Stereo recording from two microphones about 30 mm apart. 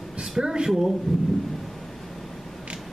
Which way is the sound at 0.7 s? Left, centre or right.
Centre.